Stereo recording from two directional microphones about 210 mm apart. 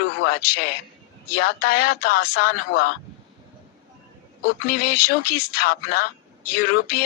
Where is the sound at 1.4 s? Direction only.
45° left (ahead or behind).